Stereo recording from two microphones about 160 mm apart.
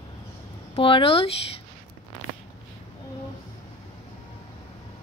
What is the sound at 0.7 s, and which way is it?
Speech, 35° left (ahead or behind).